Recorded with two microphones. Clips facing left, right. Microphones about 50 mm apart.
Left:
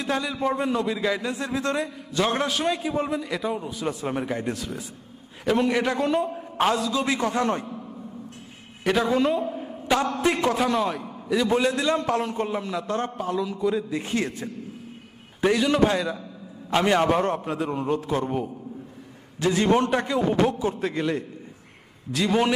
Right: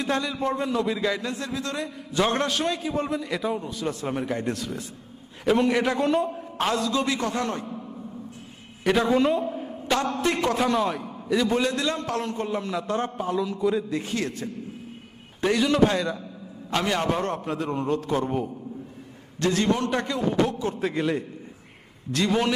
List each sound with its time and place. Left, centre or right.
0.0 s a man's voice: centre
1.5 s a man's voice: left
2.1 s a man's voice: centre
8.8 s a man's voice: centre
14.0 s a man's voice: left
15.4 s a man's voice: centre
16.8 s a man's voice: left
20.3 s a man's voice: left
20.7 s a man's voice: centre